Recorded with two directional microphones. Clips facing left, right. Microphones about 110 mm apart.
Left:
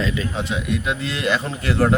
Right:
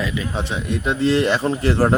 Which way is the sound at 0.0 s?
15° right (ahead or behind).